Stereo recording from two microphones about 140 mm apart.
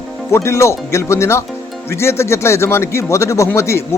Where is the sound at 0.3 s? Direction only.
20° left (ahead or behind).